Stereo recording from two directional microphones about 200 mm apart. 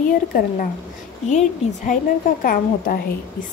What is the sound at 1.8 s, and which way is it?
A woman's voice, 45° left (ahead or behind).